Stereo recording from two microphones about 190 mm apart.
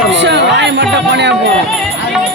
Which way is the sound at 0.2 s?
65° right (ahead or behind).